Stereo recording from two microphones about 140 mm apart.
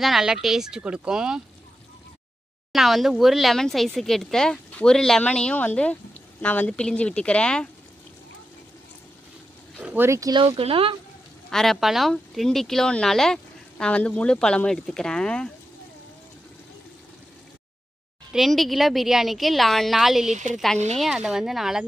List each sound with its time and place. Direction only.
0.0 s speech: centre (ahead or behind)
2.7 s speech: centre (ahead or behind)
9.8 s speech: 15° right (ahead or behind)
10.3 s speech: 40° right (ahead or behind)
11.5 s speech: centre (ahead or behind)
18.3 s speech: centre (ahead or behind)